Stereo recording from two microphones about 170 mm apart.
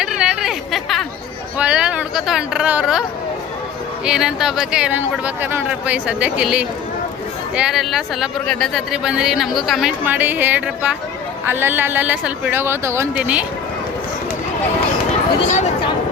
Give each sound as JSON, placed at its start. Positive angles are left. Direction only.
{"t": 0.0, "sound": "a sound", "side_deg": -5}
{"t": 1.5, "sound": "speech", "side_deg": -5}
{"t": 4.0, "sound": "speech", "side_deg": -5}
{"t": 10.0, "sound": "speech", "side_deg": -10}
{"t": 15.4, "sound": "speech", "side_deg": 45}